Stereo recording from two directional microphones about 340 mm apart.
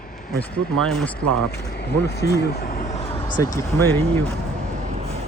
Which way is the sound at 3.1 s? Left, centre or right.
Centre.